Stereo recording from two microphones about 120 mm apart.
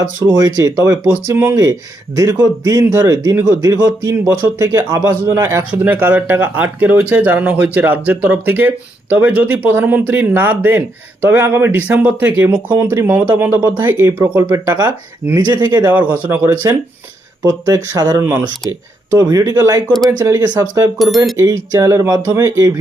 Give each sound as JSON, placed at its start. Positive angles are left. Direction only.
{"t": 0.3, "sound": "speech", "side_deg": -30}
{"t": 1.0, "sound": "speech", "side_deg": -20}
{"t": 2.1, "sound": "speech", "side_deg": -30}
{"t": 5.2, "sound": "speech", "side_deg": -20}
{"t": 15.4, "sound": "speech", "side_deg": -35}
{"t": 15.9, "sound": "speech", "side_deg": -15}
{"t": 18.2, "sound": "speech", "side_deg": -15}
{"t": 19.1, "sound": "speech", "side_deg": -30}